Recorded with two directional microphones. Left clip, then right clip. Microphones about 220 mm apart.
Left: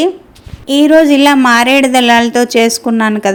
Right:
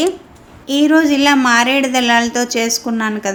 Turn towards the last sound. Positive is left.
turn(degrees=35)  # may be behind; listen again after turning